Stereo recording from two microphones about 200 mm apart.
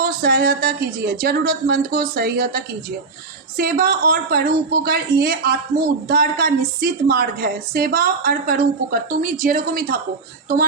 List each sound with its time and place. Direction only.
0.0 s a woman's voice: 50° right (ahead or behind)
3.6 s a woman's voice: 50° right (ahead or behind)